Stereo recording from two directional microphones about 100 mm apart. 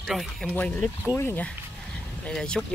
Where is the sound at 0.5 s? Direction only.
15° left (ahead or behind).